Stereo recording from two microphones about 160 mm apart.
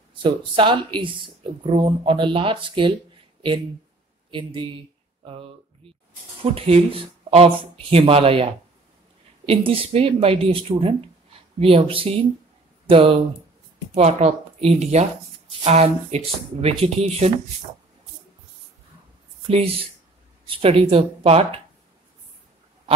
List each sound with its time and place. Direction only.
0.1 s speech: 30° right (ahead or behind)
4.3 s speech: 30° right (ahead or behind)
9.5 s speech: 35° right (ahead or behind)
19.4 s speech: 40° right (ahead or behind)